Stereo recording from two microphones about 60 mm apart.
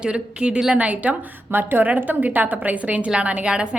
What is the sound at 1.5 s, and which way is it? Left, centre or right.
A woman's voice, right.